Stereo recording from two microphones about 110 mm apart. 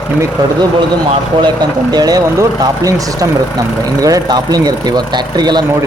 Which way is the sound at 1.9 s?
35° right (ahead or behind).